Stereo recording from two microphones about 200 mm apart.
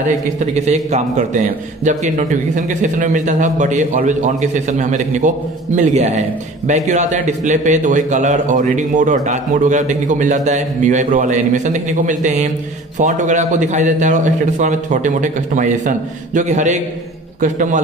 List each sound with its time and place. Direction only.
0.6 s a man's voice: 35° right (ahead or behind)